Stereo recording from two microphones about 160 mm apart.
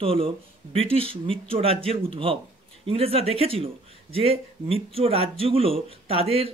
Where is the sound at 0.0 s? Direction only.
35° right (ahead or behind).